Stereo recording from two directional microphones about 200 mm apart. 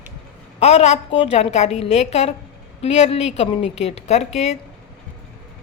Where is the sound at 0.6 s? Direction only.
30° left (ahead or behind).